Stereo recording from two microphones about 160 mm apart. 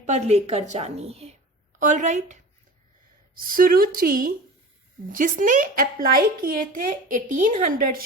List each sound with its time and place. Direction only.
0.0 s a woman's voice: 45° right (ahead or behind)
1.8 s speech: 50° right (ahead or behind)
3.3 s speech: 65° right (ahead or behind)